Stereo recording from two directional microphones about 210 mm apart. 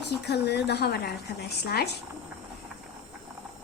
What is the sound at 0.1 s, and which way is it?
A woman's voice, 50° left (ahead or behind).